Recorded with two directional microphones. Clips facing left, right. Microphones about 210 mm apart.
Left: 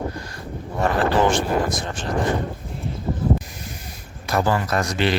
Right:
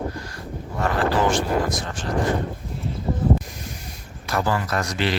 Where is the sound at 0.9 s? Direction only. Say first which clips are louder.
Left 2 dB; 25° left (ahead or behind).